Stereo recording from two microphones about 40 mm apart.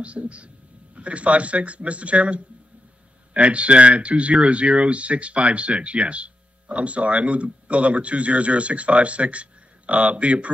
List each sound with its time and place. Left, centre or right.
0.0 s speech: right